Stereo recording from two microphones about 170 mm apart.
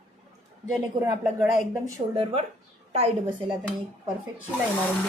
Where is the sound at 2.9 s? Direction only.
35° right (ahead or behind).